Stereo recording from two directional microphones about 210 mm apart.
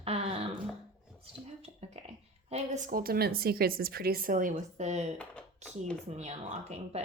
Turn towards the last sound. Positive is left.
turn(degrees=-30)  # may be behind; listen again after turning